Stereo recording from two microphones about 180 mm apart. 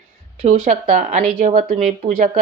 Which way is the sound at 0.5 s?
50° right (ahead or behind).